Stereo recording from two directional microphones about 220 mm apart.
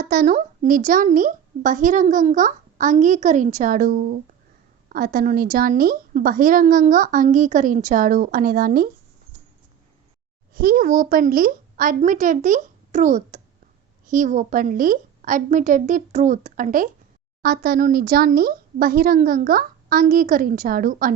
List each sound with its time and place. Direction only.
0.0 s a woman's voice: 40° right (ahead or behind)
10.5 s a woman's voice: 40° right (ahead or behind)